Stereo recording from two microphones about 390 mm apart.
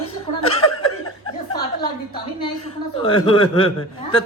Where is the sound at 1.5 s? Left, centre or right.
Centre.